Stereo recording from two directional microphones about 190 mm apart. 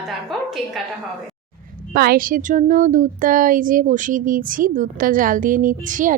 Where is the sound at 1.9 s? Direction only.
55° right (ahead or behind).